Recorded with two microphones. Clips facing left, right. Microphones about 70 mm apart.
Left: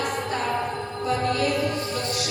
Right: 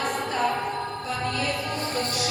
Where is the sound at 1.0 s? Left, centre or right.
Left.